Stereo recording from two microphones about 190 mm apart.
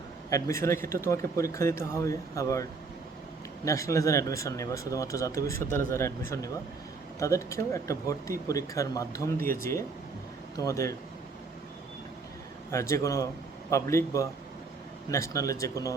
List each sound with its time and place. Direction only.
0.3 s speech: 15° left (ahead or behind)
12.7 s speech: 15° left (ahead or behind)